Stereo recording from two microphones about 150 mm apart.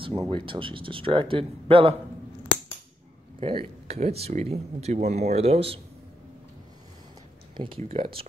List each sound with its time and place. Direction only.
0.2 s speech: 35° right (ahead or behind)
3.3 s speech: 40° right (ahead or behind)
7.5 s speech: 35° right (ahead or behind)